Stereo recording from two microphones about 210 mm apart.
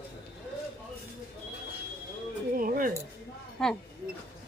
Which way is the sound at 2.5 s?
45° right (ahead or behind).